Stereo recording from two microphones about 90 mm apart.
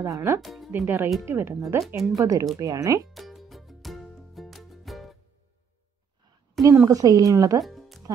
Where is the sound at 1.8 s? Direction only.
Centre (ahead or behind).